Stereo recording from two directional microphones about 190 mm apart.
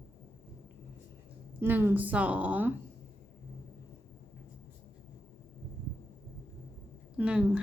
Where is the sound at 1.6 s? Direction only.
10° right (ahead or behind).